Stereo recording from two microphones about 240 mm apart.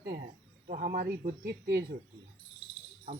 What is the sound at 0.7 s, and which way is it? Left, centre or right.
Speech, right.